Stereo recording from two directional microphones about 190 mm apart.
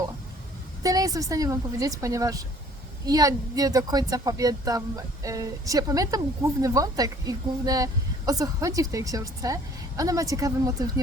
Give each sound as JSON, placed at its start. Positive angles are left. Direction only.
{"t": 0.8, "sound": "speech", "side_deg": -20}